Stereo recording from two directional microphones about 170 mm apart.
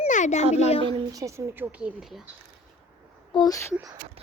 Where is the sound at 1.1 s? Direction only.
20° right (ahead or behind).